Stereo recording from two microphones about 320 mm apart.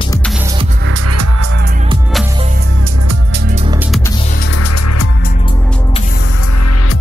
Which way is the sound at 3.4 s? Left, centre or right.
Centre.